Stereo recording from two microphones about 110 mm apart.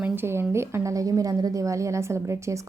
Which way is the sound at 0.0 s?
20° right (ahead or behind).